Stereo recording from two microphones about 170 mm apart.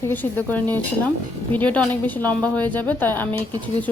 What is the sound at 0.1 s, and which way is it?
Speech, 10° left (ahead or behind).